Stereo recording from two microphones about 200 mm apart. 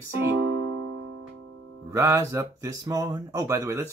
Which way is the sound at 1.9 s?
15° right (ahead or behind).